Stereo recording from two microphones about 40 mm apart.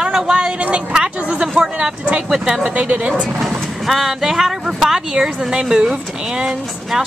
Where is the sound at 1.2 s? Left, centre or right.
Right.